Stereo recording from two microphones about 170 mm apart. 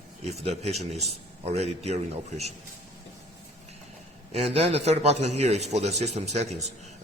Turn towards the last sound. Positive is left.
turn(degrees=-40)  # may be behind; listen again after turning